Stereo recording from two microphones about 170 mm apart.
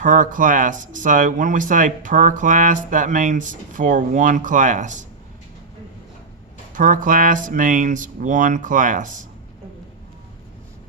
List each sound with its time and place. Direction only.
0.0 s speech: 50° right (ahead or behind)
6.7 s speech: 50° right (ahead or behind)